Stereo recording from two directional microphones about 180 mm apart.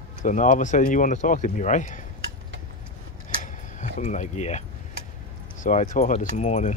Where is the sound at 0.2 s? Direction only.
45° left (ahead or behind).